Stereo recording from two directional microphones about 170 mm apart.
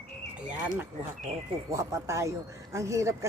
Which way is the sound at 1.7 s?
15° right (ahead or behind).